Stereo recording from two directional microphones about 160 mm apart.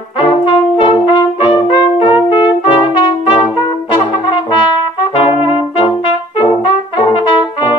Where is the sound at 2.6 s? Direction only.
30° left (ahead or behind).